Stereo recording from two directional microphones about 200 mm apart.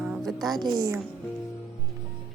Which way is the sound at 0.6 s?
20° right (ahead or behind).